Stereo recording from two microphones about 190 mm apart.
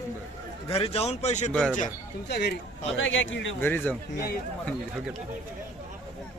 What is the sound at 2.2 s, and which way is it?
Speech, 60° left (ahead or behind).